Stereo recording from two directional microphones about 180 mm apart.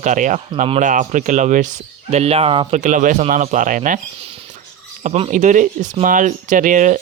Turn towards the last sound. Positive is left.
turn(degrees=-45)  # may be behind; listen again after turning